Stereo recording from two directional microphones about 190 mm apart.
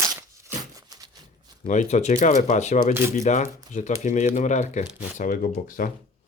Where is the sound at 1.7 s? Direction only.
40° left (ahead or behind).